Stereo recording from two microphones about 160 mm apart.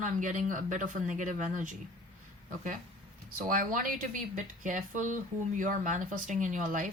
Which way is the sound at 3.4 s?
60° right (ahead or behind).